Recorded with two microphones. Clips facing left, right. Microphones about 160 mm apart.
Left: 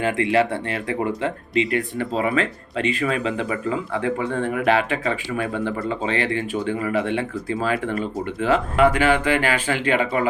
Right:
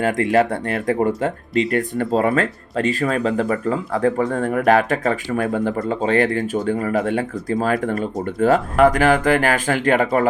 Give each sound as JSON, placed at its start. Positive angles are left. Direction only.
{"t": 0.0, "sound": "speech", "side_deg": -45}